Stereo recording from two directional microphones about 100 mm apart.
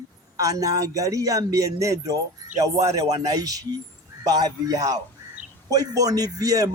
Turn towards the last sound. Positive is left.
turn(degrees=-35)  # may be behind; listen again after turning